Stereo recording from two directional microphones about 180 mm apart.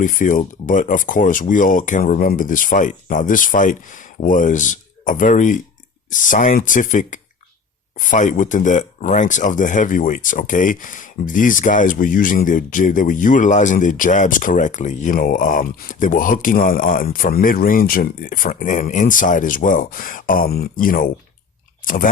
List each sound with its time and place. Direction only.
0.0 s speech: 45° left (ahead or behind)